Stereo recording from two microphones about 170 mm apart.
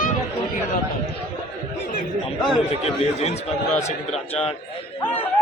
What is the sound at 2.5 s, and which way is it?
Speech, 40° left (ahead or behind).